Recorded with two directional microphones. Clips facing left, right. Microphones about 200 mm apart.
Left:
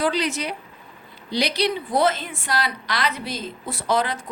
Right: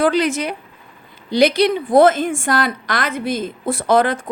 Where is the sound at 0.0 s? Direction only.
50° right (ahead or behind).